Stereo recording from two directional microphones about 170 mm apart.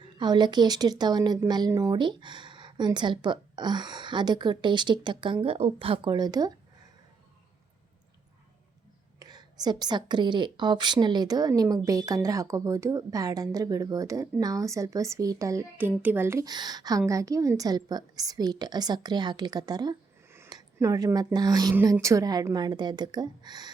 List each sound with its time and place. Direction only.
0.2 s a woman's voice: 25° right (ahead or behind)
9.1 s a woman's voice: 25° right (ahead or behind)